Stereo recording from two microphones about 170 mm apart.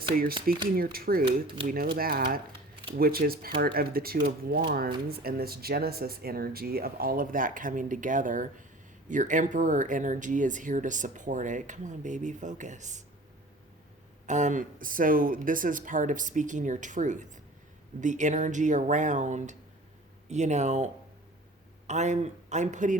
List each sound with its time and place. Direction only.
0.5 s speech: 60° right (ahead or behind)
1.2 s speech: 30° right (ahead or behind)
1.6 s speech: 55° right (ahead or behind)
14.3 s speech: 45° right (ahead or behind)